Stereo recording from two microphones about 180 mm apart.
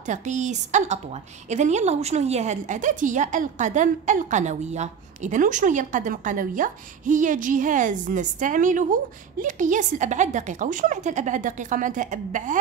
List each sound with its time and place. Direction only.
0.1 s a woman's voice: 40° right (ahead or behind)